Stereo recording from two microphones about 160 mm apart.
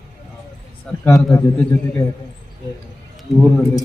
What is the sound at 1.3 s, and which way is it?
Speech, 20° left (ahead or behind).